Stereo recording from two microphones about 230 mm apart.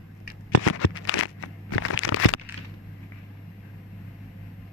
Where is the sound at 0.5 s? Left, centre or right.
Left.